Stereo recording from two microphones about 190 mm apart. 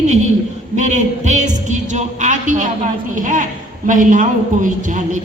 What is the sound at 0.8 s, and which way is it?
A woman's voice, 40° right (ahead or behind).